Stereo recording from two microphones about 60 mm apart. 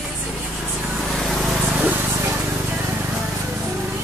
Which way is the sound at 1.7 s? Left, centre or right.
Right.